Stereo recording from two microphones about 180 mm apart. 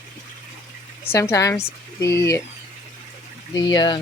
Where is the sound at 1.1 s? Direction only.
15° left (ahead or behind).